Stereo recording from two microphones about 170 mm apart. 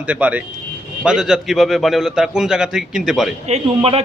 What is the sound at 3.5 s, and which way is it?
Speech, 35° right (ahead or behind).